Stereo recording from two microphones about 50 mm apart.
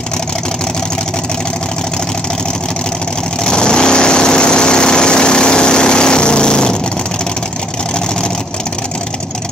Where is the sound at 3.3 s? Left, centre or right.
Centre.